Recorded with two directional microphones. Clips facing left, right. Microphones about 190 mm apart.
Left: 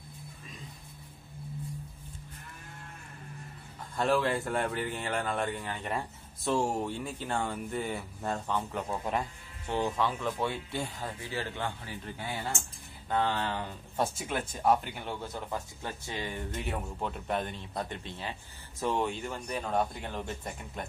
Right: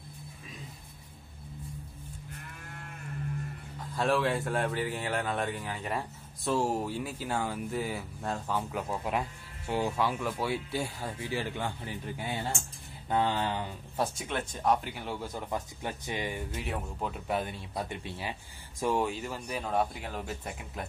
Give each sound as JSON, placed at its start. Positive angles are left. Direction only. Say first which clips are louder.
{"t": 3.9, "sound": "speech", "louder": "even", "side_deg": 0}
{"t": 13.9, "sound": "speech", "louder": "left 1 dB", "side_deg": 0}
{"t": 16.6, "sound": "speech", "louder": "even", "side_deg": 0}